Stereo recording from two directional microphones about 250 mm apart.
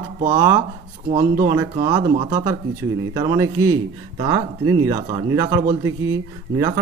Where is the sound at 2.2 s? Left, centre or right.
Centre.